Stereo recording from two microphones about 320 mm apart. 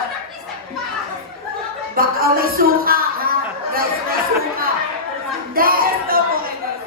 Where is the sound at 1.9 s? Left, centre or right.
Right.